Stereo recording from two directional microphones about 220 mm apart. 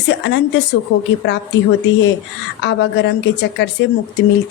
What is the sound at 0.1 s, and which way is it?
A woman's voice, 50° left (ahead or behind).